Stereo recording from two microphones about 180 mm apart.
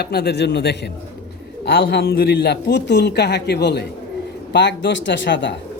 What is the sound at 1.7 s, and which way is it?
A man's voice, 55° left (ahead or behind).